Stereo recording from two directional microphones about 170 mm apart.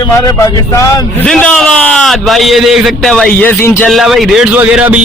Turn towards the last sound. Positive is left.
turn(degrees=-5)  # may be behind; listen again after turning